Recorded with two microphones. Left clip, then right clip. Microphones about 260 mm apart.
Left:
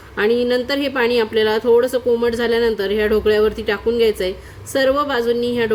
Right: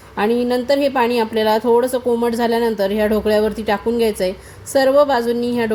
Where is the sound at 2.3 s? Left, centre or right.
Centre.